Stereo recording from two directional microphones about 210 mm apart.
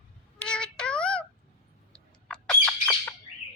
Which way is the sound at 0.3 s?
5° left (ahead or behind).